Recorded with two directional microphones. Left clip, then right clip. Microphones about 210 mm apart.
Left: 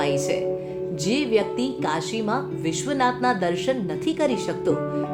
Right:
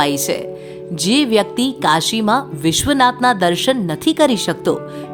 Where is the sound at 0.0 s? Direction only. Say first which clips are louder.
Right 5 dB; 50° right (ahead or behind).